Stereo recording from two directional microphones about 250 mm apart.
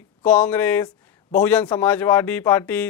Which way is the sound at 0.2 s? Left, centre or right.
Centre.